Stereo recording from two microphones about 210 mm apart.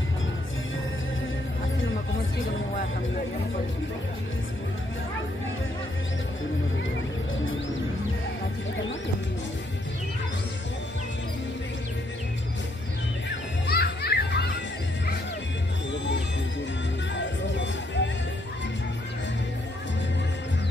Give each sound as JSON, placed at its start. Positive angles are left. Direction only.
{"t": 13.7, "sound": "children playing", "side_deg": 50}
{"t": 17.1, "sound": "music", "side_deg": 60}